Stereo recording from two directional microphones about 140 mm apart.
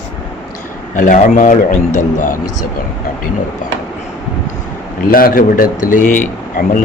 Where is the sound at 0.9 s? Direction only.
65° left (ahead or behind).